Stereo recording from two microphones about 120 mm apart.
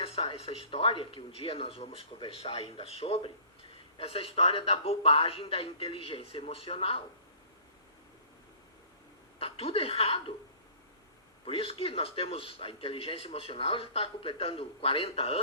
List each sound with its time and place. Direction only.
0.0 s speech: 50° left (ahead or behind)
9.4 s speech: 55° left (ahead or behind)
11.4 s speech: 50° left (ahead or behind)